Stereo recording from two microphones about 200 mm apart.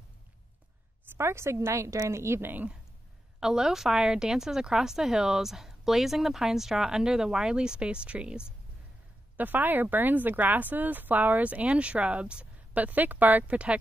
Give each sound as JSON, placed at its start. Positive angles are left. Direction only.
{"t": 1.1, "sound": "a woman's voice", "side_deg": -15}
{"t": 9.4, "sound": "speech", "side_deg": -10}